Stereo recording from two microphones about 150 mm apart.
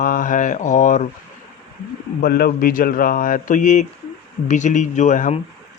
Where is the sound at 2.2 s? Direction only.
90° left.